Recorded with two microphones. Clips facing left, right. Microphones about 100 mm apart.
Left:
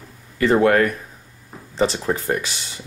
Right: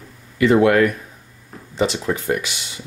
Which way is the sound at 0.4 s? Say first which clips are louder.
Right 2 dB; 35° left (ahead or behind).